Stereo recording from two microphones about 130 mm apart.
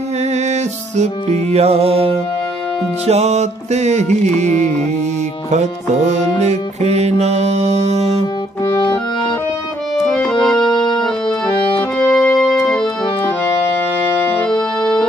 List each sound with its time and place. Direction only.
0.3 s music: 60° right (ahead or behind)
5.5 s music: 60° right (ahead or behind)
8.6 s music: 35° left (ahead or behind)
9.9 s music: 5° left (ahead or behind)
10.7 s organ: 35° left (ahead or behind)
12.0 s organ: 15° left (ahead or behind)
14.5 s music: 35° left (ahead or behind)